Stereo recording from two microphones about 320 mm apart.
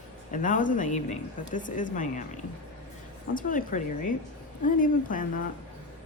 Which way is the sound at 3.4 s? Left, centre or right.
Left.